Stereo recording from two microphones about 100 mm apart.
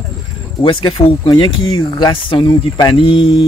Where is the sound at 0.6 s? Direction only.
55° left (ahead or behind).